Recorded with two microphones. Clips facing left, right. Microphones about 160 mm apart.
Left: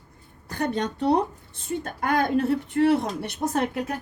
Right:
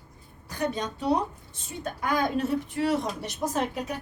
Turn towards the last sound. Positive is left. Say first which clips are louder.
# left 3 dB
turn(degrees=60)  # may be behind; listen again after turning